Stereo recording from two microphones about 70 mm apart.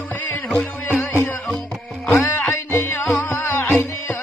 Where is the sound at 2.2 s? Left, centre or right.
Left.